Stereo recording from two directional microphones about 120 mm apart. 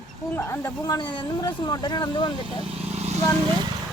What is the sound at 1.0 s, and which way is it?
Speech, 40° left (ahead or behind).